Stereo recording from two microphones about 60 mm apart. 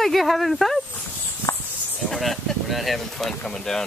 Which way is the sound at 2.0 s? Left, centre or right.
Centre.